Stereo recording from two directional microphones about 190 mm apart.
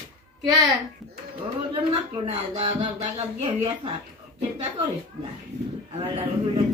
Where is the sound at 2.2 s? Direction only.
30° right (ahead or behind).